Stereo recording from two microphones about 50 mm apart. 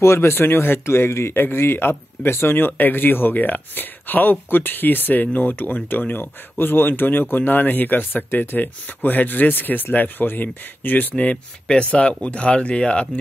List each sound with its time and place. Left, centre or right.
0.0 s speech: left